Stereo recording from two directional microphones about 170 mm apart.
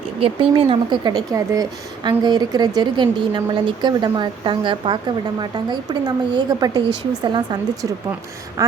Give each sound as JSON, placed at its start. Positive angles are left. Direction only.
{"t": 0.2, "sound": "speech", "side_deg": -30}